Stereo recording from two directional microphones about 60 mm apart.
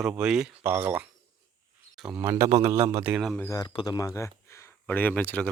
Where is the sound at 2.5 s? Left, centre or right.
Right.